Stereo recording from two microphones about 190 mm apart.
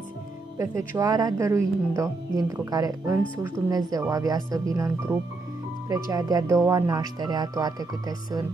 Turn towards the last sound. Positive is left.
turn(degrees=-20)  # may be behind; listen again after turning